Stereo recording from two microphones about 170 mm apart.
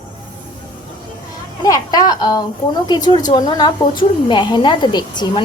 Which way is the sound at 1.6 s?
25° left (ahead or behind).